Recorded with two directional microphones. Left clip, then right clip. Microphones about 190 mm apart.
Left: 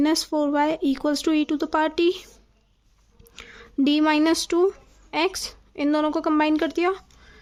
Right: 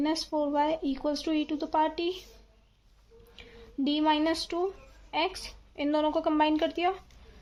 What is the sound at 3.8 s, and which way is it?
Speech, 40° left (ahead or behind).